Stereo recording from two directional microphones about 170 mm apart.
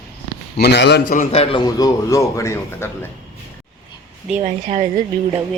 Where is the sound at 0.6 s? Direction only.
80° left.